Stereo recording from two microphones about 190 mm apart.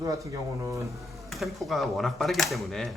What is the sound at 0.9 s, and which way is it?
Speech, centre (ahead or behind).